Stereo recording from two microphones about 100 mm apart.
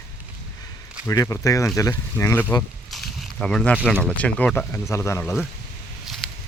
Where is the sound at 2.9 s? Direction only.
Centre (ahead or behind).